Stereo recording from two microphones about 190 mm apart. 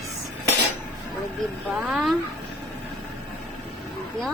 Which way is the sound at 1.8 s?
Centre (ahead or behind).